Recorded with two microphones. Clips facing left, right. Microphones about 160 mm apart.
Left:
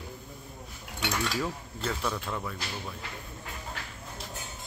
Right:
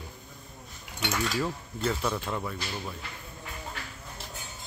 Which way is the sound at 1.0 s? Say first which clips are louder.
Right 1 dB; centre (ahead or behind).